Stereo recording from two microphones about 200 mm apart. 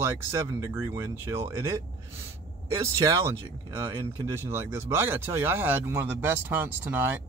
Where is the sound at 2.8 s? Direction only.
15° right (ahead or behind).